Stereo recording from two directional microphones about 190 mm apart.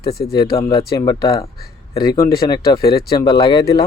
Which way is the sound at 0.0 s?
55° left (ahead or behind).